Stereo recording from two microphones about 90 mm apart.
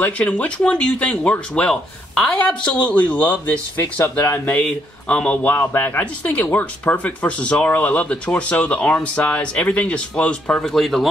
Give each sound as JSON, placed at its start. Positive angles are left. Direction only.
{"t": 0.0, "sound": "speech", "side_deg": 15}